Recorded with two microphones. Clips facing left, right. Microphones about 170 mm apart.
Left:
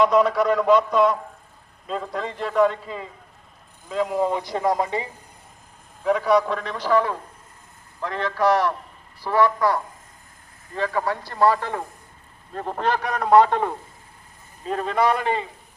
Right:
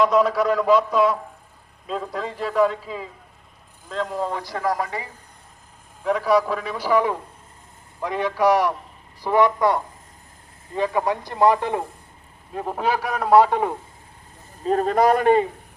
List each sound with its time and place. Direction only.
0.0 s a man's voice: centre (ahead or behind); by 5.0 s 25° left (ahead or behind)
6.0 s a man's voice: centre (ahead or behind)
14.6 s a man's voice: 40° right (ahead or behind)